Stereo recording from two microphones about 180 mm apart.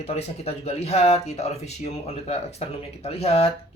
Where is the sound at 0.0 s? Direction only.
35° left (ahead or behind).